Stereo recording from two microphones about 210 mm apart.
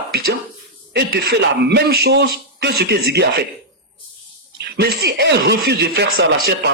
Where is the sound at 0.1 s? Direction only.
50° right (ahead or behind).